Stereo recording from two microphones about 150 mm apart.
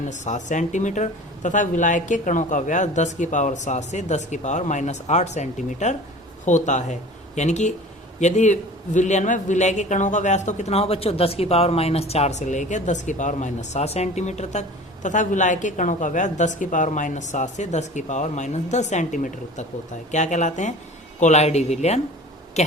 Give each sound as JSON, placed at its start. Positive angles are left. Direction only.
{"t": 0.0, "sound": "a man's voice", "side_deg": 55}